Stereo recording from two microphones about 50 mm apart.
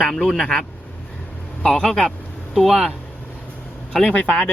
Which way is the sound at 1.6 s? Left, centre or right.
Centre.